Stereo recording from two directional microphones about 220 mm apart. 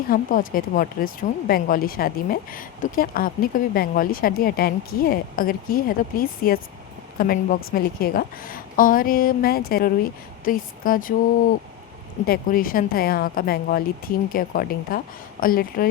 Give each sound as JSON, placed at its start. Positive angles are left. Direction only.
{"t": 0.1, "sound": "speech", "side_deg": 40}
{"t": 12.2, "sound": "speech", "side_deg": 40}